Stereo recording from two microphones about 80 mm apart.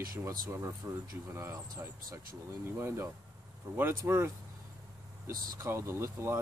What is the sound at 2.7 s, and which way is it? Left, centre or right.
Speech, right.